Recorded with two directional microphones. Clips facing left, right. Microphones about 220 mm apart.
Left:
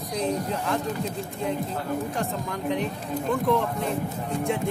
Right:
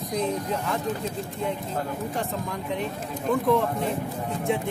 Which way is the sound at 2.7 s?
Centre (ahead or behind).